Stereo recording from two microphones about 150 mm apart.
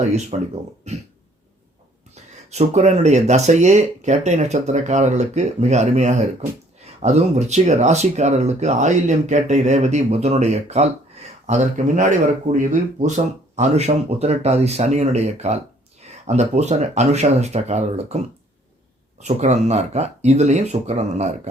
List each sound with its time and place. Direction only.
0.0 s speech: 50° right (ahead or behind)
2.5 s speech: 45° right (ahead or behind)
19.2 s speech: 50° right (ahead or behind)